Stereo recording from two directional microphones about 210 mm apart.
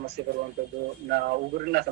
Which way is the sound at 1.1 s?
45° right (ahead or behind).